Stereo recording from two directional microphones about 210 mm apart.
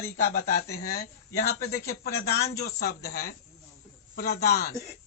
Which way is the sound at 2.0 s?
50° left (ahead or behind).